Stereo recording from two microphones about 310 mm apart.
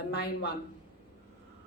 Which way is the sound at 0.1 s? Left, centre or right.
Left.